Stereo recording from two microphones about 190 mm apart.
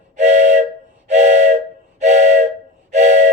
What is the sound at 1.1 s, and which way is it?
Train, 40° right (ahead or behind).